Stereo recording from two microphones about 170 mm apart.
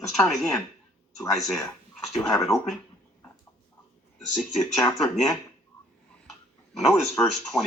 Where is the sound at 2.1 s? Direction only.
15° left (ahead or behind).